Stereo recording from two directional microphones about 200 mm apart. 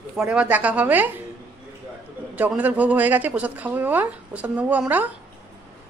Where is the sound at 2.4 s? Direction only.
10° right (ahead or behind).